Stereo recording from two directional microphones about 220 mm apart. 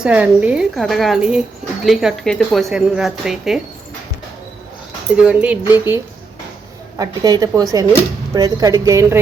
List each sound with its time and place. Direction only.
0.0 s speech: 5° right (ahead or behind)
5.1 s speech: 5° right (ahead or behind)
7.0 s speech: 15° right (ahead or behind)